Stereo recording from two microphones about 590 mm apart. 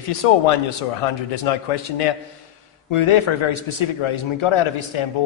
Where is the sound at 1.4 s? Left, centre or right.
Left.